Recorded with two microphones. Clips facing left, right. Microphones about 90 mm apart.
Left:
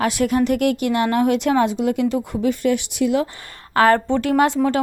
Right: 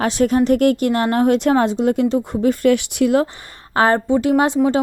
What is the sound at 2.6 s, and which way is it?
Speech, 60° right (ahead or behind).